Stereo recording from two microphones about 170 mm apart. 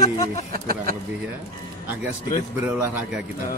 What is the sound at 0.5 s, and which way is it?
Speech, 55° right (ahead or behind).